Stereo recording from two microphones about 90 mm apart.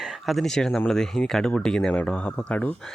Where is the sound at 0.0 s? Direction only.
5° right (ahead or behind).